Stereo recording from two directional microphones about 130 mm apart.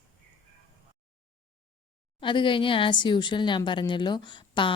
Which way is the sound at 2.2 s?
40° left (ahead or behind).